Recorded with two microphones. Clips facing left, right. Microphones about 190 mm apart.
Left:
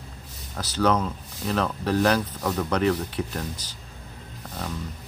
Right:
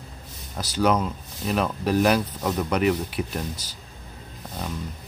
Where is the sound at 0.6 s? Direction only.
10° right (ahead or behind).